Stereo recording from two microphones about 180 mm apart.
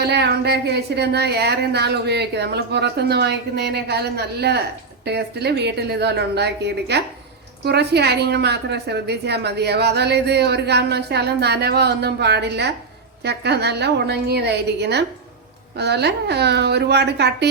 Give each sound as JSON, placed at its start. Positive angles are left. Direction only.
{"t": 0.0, "sound": "a woman's voice", "side_deg": -65}